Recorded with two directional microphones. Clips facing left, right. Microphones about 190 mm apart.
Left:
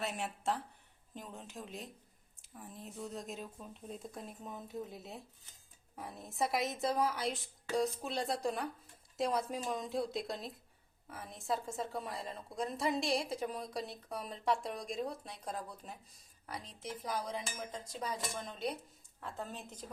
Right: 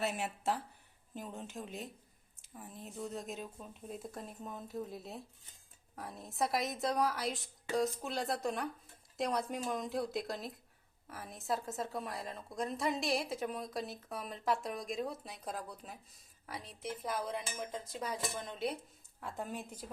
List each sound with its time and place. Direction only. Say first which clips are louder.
0.0 s a woman's voice: right 2 dB; 5° right (ahead or behind)